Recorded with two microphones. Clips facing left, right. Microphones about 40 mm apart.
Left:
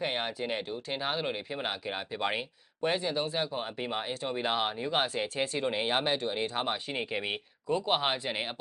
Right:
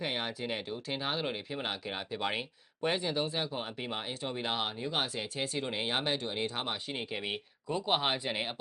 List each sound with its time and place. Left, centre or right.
0.0 s speech: centre
7.7 s speech: centre